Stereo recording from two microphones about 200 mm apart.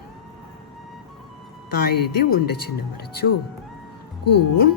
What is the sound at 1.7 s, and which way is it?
Speech, 50° left (ahead or behind).